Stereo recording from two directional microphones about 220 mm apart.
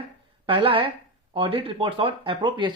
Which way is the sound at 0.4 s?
25° right (ahead or behind).